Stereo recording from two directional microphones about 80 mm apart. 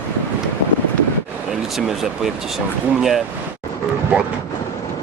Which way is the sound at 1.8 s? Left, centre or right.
Centre.